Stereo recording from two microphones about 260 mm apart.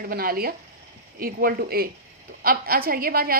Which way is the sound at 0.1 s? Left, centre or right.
Right.